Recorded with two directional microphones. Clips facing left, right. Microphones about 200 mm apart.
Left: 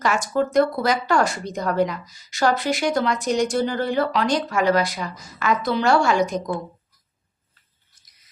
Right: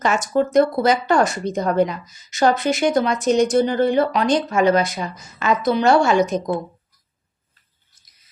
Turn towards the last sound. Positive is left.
turn(degrees=-20)  # may be behind; listen again after turning